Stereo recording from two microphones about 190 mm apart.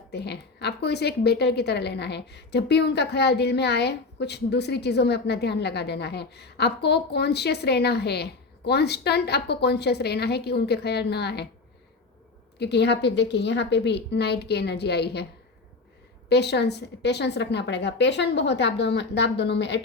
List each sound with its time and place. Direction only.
0.1 s a woman's voice: 60° left (ahead or behind)
12.5 s a woman's voice: 60° left (ahead or behind)
16.3 s a woman's voice: 60° left (ahead or behind)